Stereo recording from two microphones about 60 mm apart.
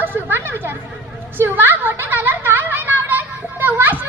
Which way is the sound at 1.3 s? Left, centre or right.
Right.